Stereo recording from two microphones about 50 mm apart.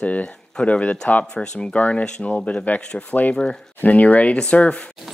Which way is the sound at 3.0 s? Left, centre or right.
Left.